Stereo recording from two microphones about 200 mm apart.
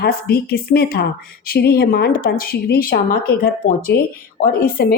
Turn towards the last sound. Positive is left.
turn(degrees=50)  # may be behind; listen again after turning